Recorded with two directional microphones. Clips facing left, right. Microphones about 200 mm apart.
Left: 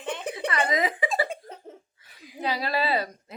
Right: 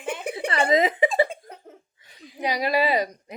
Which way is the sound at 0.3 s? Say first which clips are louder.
Right 6 dB; 30° right (ahead or behind).